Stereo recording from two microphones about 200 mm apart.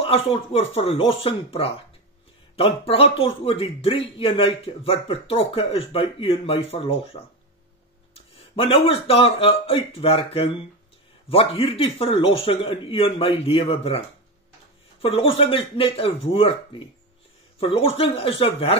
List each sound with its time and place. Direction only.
0.0 s a man's voice: 30° left (ahead or behind)